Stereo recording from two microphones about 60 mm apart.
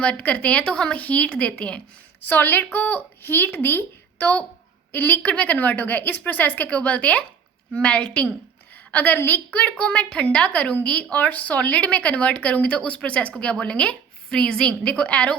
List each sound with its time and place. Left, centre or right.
0.0 s speech: centre
2.2 s speech: left